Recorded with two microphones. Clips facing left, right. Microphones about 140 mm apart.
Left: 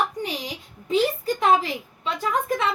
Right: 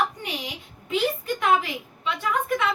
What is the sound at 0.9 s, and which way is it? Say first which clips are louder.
A woman's voice: left 3 dB; 35° left (ahead or behind).